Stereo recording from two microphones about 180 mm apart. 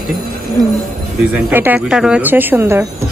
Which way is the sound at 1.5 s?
10° right (ahead or behind).